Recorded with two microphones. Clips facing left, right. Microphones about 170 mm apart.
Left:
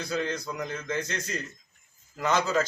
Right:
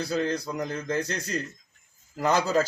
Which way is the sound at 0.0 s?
35° right (ahead or behind).